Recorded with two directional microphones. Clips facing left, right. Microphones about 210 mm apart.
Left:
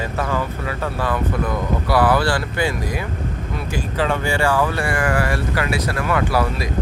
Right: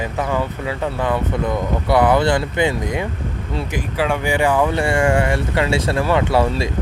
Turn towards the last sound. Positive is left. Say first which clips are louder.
# right 3 dB
turn(degrees=-25)  # may be behind; listen again after turning